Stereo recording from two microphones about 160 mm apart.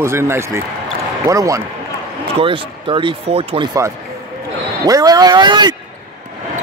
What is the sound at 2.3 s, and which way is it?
Speech, 35° right (ahead or behind).